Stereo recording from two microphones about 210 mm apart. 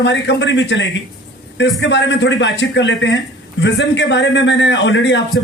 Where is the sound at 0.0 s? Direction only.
55° left (ahead or behind).